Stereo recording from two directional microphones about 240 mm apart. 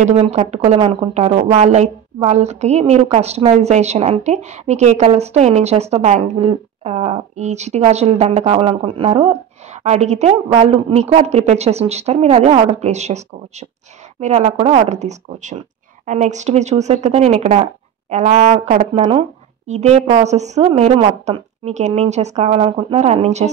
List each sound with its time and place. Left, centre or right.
0.0 s speech: right